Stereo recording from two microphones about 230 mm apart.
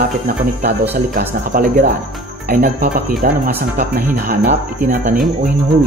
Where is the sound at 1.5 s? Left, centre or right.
Right.